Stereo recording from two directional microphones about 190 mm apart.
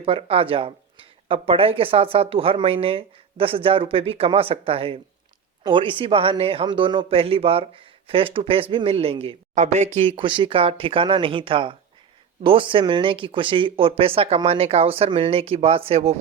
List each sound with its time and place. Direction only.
0.0 s speech: 30° right (ahead or behind)